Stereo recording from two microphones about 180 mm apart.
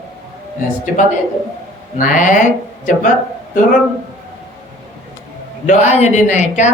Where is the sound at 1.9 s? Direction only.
45° left (ahead or behind).